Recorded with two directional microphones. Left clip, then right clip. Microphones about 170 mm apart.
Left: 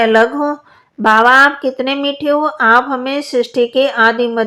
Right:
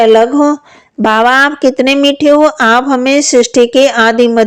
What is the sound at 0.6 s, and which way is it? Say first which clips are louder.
Speech: right 2 dB; 40° right (ahead or behind).